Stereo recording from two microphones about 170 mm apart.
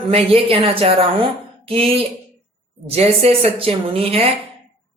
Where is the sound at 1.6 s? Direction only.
35° right (ahead or behind).